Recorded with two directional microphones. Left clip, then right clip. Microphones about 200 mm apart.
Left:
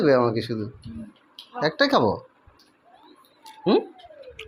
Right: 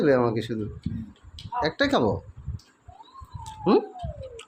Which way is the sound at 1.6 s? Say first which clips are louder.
Left 3 dB; 5° right (ahead or behind).